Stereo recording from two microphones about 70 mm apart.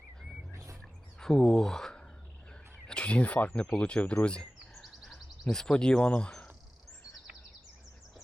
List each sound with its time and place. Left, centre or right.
0.5 s bird: right
1.2 s speech: centre
4.8 s a sound: centre
5.5 s speech: centre